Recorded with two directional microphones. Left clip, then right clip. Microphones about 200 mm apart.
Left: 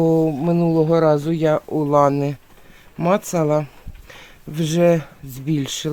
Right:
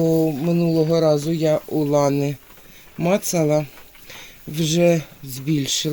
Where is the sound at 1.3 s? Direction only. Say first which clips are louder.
Left 1 dB; 15° left (ahead or behind).